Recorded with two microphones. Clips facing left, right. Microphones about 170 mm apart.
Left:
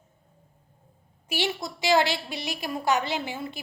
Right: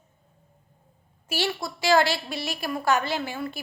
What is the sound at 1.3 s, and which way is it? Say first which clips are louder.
A woman's voice: right 1 dB; 15° left (ahead or behind).